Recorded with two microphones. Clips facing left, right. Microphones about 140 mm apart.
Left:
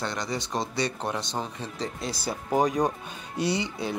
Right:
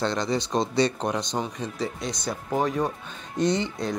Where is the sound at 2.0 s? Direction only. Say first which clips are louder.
Right 1 dB; 5° left (ahead or behind).